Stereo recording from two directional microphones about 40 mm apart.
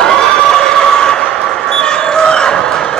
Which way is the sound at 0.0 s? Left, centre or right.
Centre.